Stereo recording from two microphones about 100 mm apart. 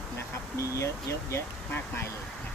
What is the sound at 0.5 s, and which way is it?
Speech, 30° left (ahead or behind).